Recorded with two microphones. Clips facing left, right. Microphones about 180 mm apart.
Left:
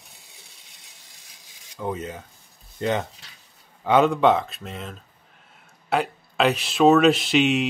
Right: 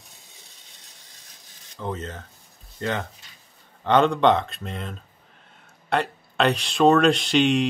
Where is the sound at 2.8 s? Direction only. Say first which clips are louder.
Left 3 dB; 20° left (ahead or behind).